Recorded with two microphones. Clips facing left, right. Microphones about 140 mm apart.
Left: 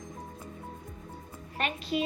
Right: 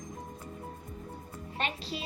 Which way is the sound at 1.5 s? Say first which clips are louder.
Left 5 dB; 30° right (ahead or behind).